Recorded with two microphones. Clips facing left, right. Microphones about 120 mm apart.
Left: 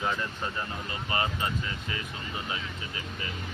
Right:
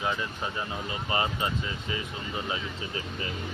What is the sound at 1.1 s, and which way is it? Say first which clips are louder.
Speech: right 1 dB; 20° right (ahead or behind).